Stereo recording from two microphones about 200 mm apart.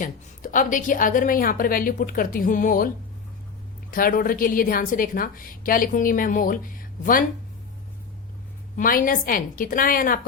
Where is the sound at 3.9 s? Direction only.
45° left (ahead or behind).